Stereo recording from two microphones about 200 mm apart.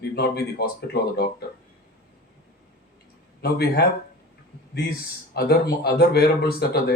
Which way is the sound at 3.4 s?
55° left (ahead or behind).